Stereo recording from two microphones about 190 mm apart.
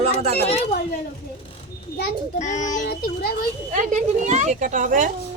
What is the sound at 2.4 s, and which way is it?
Speech, 40° left (ahead or behind).